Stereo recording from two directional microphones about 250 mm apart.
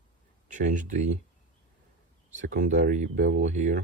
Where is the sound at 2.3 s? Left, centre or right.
Right.